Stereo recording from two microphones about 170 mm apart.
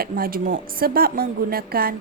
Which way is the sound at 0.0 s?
60° right (ahead or behind).